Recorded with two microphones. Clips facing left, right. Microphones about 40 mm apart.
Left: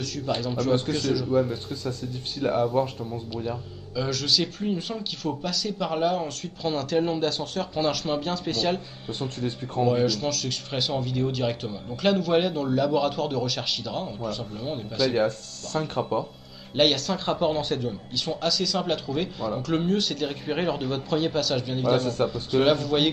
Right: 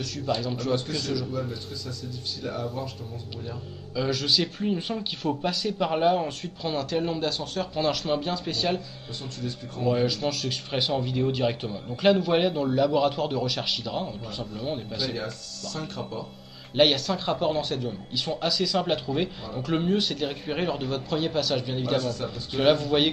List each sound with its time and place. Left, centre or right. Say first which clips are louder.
0.4 s speech: left 3 dB; centre
2.4 s speech: left 10 dB; left
3.9 s speech: even; centre
6.6 s speech: left 3 dB; centre
9.2 s speech: left 5 dB; left
9.8 s speech: even; centre
15.1 s speech: left 9 dB; left
16.7 s speech: right 1 dB; centre
18.1 s speech: even; centre
21.9 s speech: left 3 dB; left
22.6 s speech: even; centre